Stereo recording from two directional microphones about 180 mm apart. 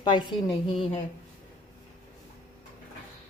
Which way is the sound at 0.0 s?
25° left (ahead or behind).